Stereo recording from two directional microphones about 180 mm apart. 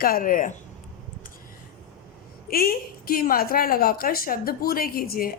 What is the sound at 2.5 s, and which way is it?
A woman's voice, 55° left (ahead or behind).